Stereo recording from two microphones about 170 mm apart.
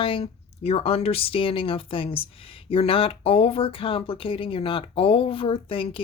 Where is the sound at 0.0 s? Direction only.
30° left (ahead or behind).